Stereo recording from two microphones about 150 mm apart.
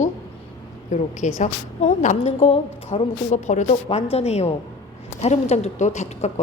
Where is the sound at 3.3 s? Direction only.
55° left (ahead or behind).